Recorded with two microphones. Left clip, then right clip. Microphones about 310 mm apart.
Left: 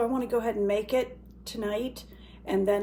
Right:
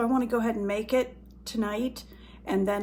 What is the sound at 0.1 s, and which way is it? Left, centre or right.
A woman's voice, centre.